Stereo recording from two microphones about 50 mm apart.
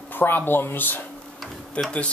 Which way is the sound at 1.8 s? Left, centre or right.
Left.